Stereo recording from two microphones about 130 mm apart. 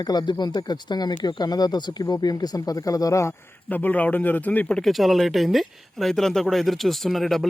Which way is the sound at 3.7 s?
15° left (ahead or behind).